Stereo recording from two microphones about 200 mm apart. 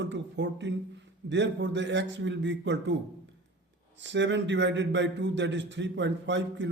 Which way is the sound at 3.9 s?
65° right (ahead or behind).